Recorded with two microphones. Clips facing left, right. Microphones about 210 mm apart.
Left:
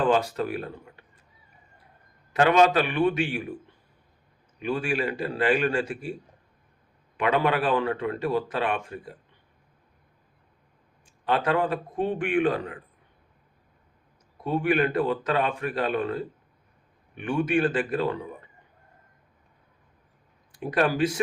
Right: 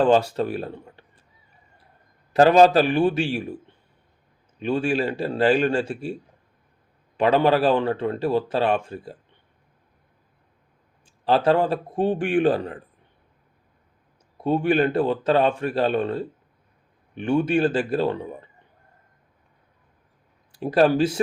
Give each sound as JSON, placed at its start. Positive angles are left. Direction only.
{"t": 0.0, "sound": "speech", "side_deg": -30}
{"t": 2.3, "sound": "speech", "side_deg": -35}
{"t": 4.6, "sound": "speech", "side_deg": -30}
{"t": 7.2, "sound": "speech", "side_deg": -30}
{"t": 11.0, "sound": "speech", "side_deg": -30}
{"t": 14.4, "sound": "speech", "side_deg": -30}
{"t": 20.5, "sound": "speech", "side_deg": -30}